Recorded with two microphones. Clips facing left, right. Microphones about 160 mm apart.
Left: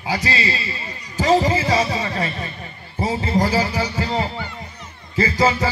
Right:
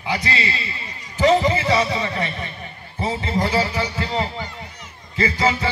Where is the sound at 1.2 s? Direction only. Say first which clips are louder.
Even; 35° left (ahead or behind).